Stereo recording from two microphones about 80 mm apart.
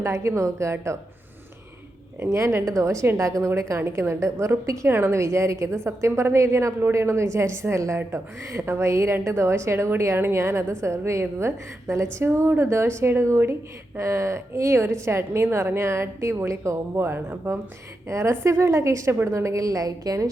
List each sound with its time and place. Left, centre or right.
0.0 s a woman's voice: right
2.1 s a woman's voice: right